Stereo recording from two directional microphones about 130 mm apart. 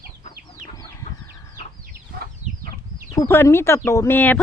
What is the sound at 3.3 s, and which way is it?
Speech, 20° left (ahead or behind).